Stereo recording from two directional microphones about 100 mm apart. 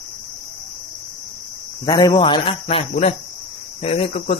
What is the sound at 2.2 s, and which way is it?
Speech, 55° left (ahead or behind).